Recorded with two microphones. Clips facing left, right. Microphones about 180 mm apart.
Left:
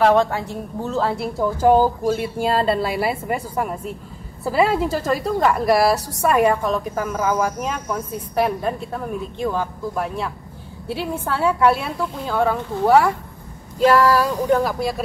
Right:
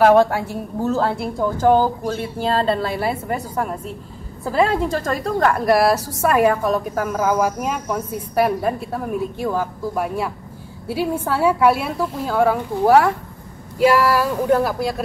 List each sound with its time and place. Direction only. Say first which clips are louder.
0.0 s a woman's voice: right 3 dB; 10° right (ahead or behind)
14.5 s a woman's voice: right 2 dB; 5° right (ahead or behind)